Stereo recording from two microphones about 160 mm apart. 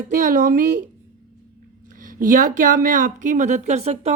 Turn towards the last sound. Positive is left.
turn(degrees=-45)  # may be behind; listen again after turning